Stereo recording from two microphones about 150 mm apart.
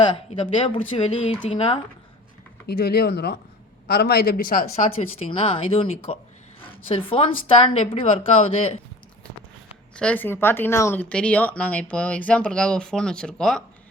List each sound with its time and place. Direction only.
0.3 s speech: 35° left (ahead or behind)
2.6 s speech: 90° left; by 4.6 s 70° left (ahead or behind)
4.6 s speech: 45° left (ahead or behind)
9.9 s speech: 10° left (ahead or behind)